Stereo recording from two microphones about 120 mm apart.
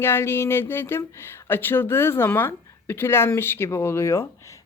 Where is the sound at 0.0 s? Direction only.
20° left (ahead or behind).